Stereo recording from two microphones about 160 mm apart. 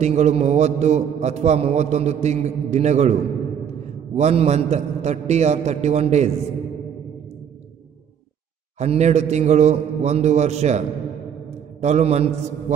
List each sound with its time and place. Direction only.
0.0 s a man's voice: 45° right (ahead or behind)
8.7 s a man's voice: 45° right (ahead or behind)
11.8 s a man's voice: 45° right (ahead or behind)